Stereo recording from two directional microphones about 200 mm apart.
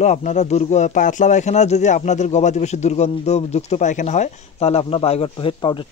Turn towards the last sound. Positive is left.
turn(degrees=25)  # may be behind; listen again after turning